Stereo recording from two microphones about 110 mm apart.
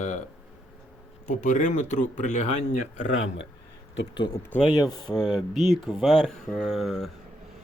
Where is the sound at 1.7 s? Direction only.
90° left.